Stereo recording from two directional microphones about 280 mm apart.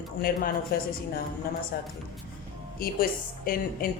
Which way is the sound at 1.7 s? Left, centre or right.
Left.